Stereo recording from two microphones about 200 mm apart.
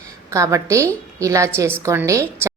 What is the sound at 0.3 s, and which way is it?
A woman's voice, 15° right (ahead or behind).